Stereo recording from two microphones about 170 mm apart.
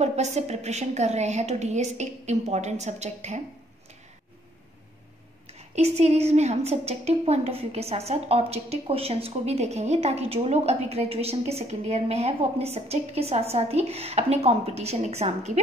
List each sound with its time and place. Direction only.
0.0 s a woman's voice: 40° right (ahead or behind)
5.5 s a woman's voice: 40° right (ahead or behind)